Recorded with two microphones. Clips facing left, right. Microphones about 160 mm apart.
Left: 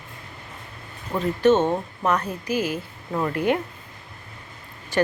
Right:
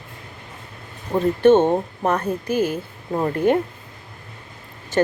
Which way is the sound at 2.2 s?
55° right (ahead or behind).